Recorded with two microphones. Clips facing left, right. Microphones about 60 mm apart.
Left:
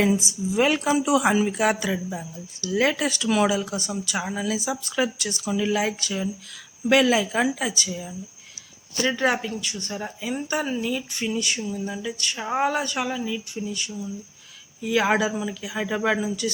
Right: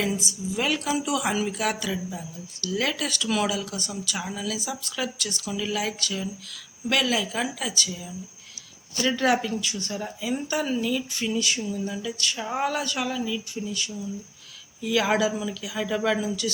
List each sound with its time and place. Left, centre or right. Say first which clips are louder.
0.0 s speech: left 6 dB; left; by 9.9 s centre
9.9 s speech: even; centre
14.8 s speech: left 1 dB; left